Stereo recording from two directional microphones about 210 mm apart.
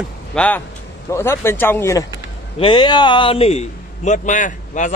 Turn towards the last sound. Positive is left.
turn(degrees=35)  # may be behind; listen again after turning